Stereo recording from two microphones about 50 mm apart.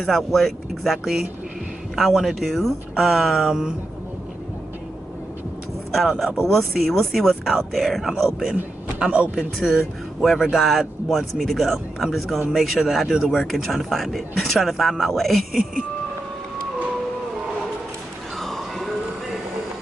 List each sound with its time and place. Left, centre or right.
0.0 s speech: centre
5.9 s speech: centre
9.0 s a man's voice: right
9.6 s speech: centre
18.4 s a sound: centre